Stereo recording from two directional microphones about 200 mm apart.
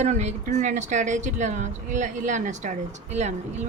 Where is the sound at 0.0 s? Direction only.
35° right (ahead or behind).